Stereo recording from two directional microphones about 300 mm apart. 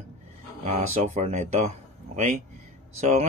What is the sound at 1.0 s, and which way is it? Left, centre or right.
Speech, right.